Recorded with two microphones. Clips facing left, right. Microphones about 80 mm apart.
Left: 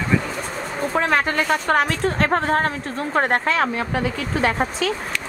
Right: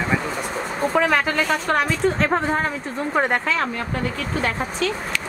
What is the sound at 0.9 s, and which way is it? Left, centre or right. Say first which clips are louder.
Speech: even; centre.